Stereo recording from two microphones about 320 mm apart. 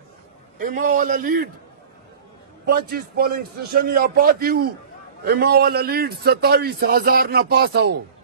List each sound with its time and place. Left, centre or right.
0.6 s a man's voice: right
2.6 s a man's voice: right